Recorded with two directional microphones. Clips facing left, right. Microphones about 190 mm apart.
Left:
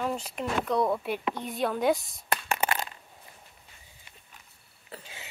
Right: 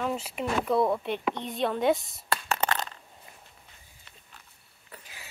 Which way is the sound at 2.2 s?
15° left (ahead or behind).